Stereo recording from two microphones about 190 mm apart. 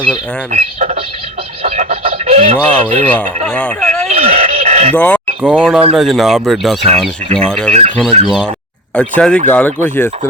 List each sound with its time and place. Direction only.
0.5 s speech: 40° right (ahead or behind)
2.6 s speech: 5° left (ahead or behind)
4.1 s a sound: 45° right (ahead or behind)
4.9 s speech: 5° left (ahead or behind)
5.4 s speech: 5° right (ahead or behind)
7.7 s speech: 35° right (ahead or behind)
9.0 s speech: 5° left (ahead or behind)